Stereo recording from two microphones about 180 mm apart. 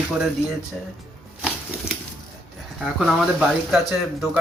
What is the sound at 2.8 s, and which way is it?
A man's voice, centre (ahead or behind).